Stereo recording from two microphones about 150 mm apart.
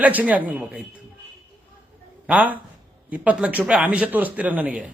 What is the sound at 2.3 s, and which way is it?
A man's voice, 10° right (ahead or behind).